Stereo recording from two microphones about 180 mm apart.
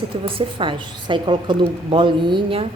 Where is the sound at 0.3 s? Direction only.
25° right (ahead or behind).